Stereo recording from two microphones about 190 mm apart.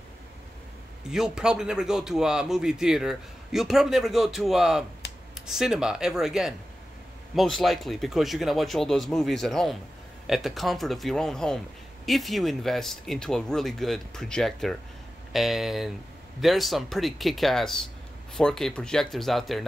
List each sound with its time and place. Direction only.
1.1 s speech: 5° right (ahead or behind)